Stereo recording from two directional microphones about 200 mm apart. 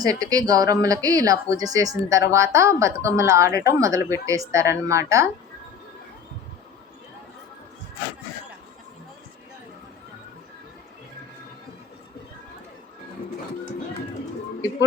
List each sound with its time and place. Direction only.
0.0 s speech: 15° right (ahead or behind)